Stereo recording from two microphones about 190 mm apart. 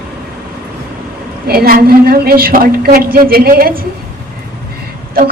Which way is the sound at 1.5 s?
50° right (ahead or behind).